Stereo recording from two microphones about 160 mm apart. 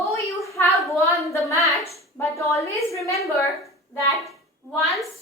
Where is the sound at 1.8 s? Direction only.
20° left (ahead or behind).